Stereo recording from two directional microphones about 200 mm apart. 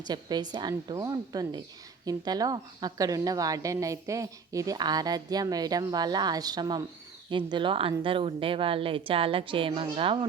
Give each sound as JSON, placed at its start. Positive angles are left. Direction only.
{"t": 0.0, "sound": "a woman's voice", "side_deg": -20}